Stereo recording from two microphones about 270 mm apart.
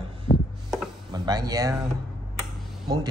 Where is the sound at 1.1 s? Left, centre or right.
Centre.